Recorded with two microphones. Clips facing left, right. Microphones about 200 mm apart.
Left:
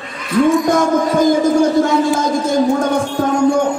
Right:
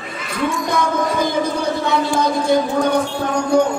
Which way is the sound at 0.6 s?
45° left (ahead or behind).